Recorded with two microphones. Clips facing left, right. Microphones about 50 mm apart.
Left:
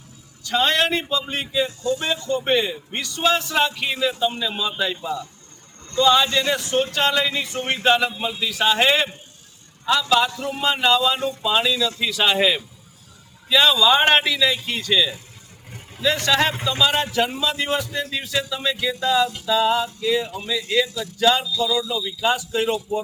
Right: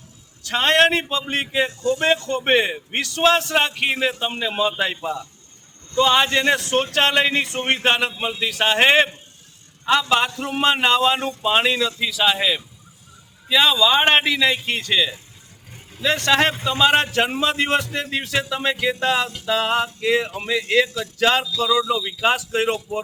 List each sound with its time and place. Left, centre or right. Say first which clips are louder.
0.4 s a man's voice: right 3 dB; right
3.5 s speech: right 1 dB; right
6.6 s a man's voice: right 2 dB; right
7.2 s speech: right 4 dB; right
11.9 s a man's voice: even; centre
13.5 s a man's voice: even; centre; by 15.1 s right
16.1 s speech: right 4 dB; right
17.0 s speech: right 2 dB; right
21.2 s a sound: even; right
21.8 s a man's voice: right 3 dB; right